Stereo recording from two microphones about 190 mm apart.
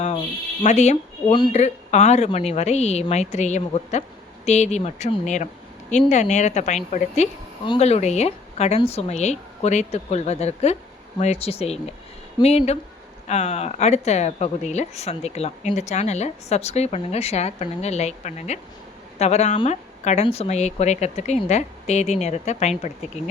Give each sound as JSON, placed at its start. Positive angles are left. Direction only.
{"t": 0.6, "sound": "speech", "side_deg": 40}